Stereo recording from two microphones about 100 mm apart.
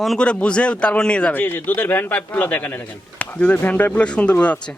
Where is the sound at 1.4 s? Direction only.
20° left (ahead or behind).